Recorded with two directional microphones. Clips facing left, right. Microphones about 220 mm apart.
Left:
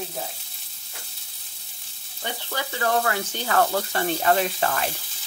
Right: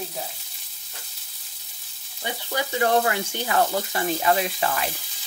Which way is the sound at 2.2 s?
15° right (ahead or behind).